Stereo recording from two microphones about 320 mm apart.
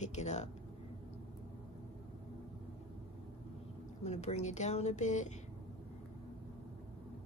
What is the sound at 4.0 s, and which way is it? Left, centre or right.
A woman's voice, centre.